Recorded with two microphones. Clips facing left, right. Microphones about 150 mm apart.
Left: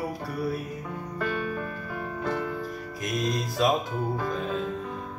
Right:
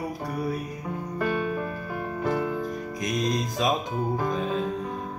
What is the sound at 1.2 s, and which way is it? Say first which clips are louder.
Music: right 3 dB; 15° right (ahead or behind).